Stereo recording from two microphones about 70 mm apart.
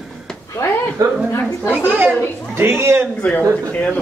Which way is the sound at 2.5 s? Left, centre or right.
Right.